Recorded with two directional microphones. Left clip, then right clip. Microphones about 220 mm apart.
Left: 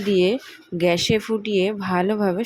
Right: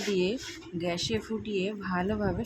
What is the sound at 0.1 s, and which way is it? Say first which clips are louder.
Speech: left 12 dB; 25° left (ahead or behind).